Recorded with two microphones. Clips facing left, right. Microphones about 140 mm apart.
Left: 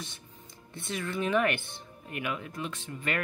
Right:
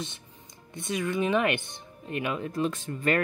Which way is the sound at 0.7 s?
15° right (ahead or behind).